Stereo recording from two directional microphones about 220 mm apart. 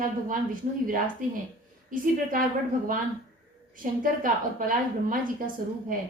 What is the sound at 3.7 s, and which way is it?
A woman's voice, 40° right (ahead or behind).